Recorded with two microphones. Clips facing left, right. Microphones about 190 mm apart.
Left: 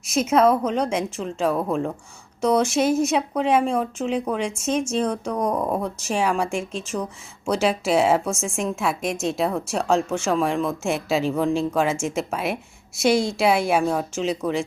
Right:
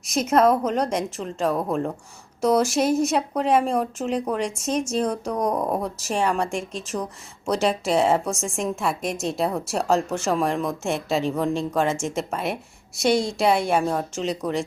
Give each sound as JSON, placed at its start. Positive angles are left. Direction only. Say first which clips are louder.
{"t": 0.0, "sound": "speech", "louder": "left 1 dB", "side_deg": 0}
{"t": 5.5, "sound": "a woman's voice", "louder": "even", "side_deg": -15}
{"t": 5.8, "sound": "speech", "louder": "left 1 dB", "side_deg": 0}